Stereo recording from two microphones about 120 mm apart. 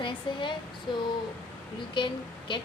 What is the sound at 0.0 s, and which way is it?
A woman's voice, 40° left (ahead or behind).